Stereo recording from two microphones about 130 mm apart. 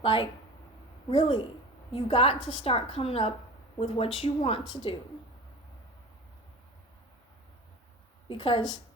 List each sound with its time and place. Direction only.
0.0 s a woman's voice: 45° left (ahead or behind)
8.3 s a woman's voice: 45° left (ahead or behind)